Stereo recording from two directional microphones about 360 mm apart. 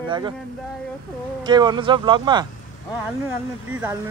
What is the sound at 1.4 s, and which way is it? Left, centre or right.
Speech, centre.